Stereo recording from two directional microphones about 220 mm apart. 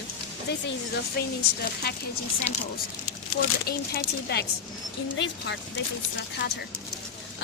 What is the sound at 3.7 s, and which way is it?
A woman's voice, 45° left (ahead or behind).